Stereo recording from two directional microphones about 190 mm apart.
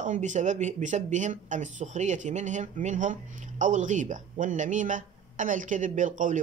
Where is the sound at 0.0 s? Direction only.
40° right (ahead or behind).